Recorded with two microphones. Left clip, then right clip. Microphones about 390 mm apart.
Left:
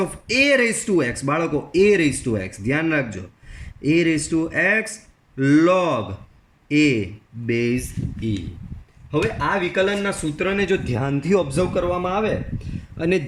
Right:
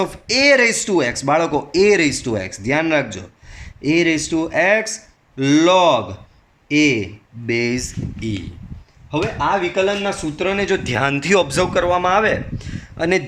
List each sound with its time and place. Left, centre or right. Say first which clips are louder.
0.0 s speech: right 3 dB; centre
9.8 s speech: right 2 dB; centre